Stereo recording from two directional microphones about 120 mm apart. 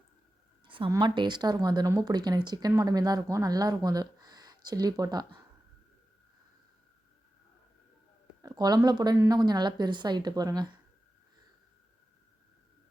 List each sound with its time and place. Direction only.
0.9 s speech: 40° right (ahead or behind)
8.4 s speech: 30° right (ahead or behind)